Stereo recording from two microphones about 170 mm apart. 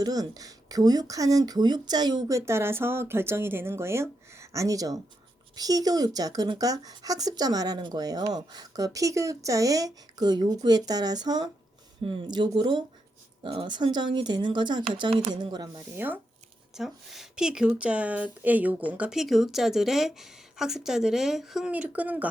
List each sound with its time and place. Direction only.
0.0 s speech: 20° right (ahead or behind)
16.0 s speech: 10° right (ahead or behind)